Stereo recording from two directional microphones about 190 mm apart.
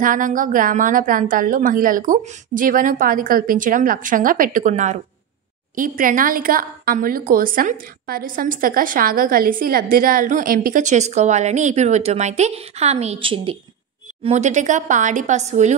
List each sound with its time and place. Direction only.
0.0 s a woman's voice: 45° right (ahead or behind)